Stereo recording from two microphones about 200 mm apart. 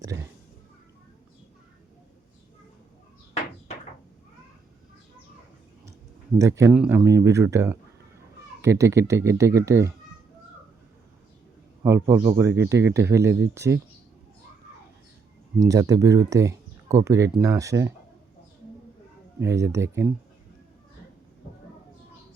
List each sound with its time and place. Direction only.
0.0 s a sound: 15° right (ahead or behind)
6.4 s speech: 15° right (ahead or behind)
11.8 s speech: 15° right (ahead or behind)
15.5 s speech: 15° right (ahead or behind)
19.4 s speech: 15° right (ahead or behind)